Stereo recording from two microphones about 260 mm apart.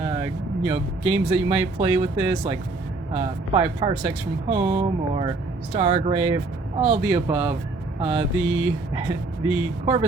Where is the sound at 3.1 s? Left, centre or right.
Right.